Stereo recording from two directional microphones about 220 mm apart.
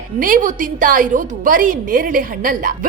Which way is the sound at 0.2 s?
40° right (ahead or behind).